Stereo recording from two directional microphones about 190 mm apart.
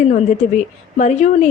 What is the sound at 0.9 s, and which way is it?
Speech, 40° left (ahead or behind).